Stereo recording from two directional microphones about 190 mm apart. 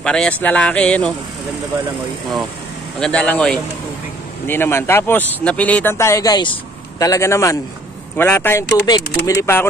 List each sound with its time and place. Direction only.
0.0 s speech: 5° left (ahead or behind)
3.0 s speech: 5° left (ahead or behind)